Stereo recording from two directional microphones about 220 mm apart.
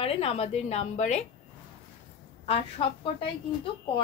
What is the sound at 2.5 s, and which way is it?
A woman's voice, 25° left (ahead or behind).